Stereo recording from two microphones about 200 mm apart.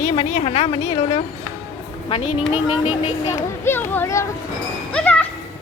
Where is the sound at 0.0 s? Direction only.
35° left (ahead or behind).